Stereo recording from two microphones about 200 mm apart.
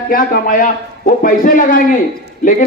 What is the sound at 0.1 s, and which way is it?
A man's voice, 45° left (ahead or behind).